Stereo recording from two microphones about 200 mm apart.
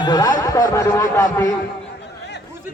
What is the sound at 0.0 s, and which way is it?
Speech, 20° left (ahead or behind).